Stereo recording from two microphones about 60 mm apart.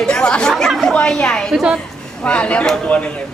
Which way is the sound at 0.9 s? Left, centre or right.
Centre.